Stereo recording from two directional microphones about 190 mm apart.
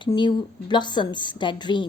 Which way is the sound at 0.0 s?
25° left (ahead or behind).